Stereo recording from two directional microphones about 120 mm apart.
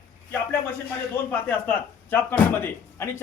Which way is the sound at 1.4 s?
15° left (ahead or behind).